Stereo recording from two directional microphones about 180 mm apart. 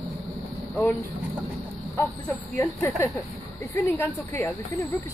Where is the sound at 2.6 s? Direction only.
10° left (ahead or behind).